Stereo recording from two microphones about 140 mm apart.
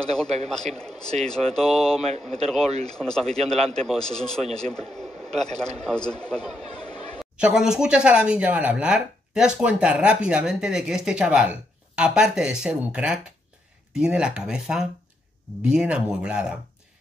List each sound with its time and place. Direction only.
0.0 s speech: 5° left (ahead or behind)
6.7 s a sound: 30° left (ahead or behind)
7.2 s speech: 5° right (ahead or behind)